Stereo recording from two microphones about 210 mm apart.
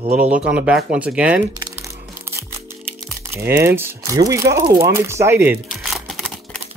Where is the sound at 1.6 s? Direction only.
15° right (ahead or behind).